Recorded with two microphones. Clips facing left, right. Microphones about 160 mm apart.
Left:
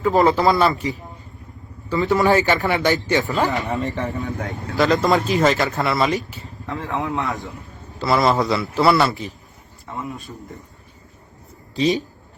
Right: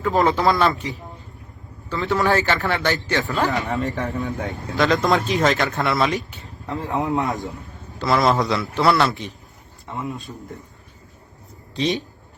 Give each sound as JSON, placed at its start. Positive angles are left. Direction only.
{"t": 0.0, "sound": "a man's voice", "side_deg": 0}
{"t": 1.9, "sound": "a man's voice", "side_deg": 10}
{"t": 3.7, "sound": "a man's voice", "side_deg": 0}
{"t": 6.7, "sound": "speech", "side_deg": -20}
{"t": 7.9, "sound": "a man's voice", "side_deg": 0}
{"t": 11.7, "sound": "speech", "side_deg": 0}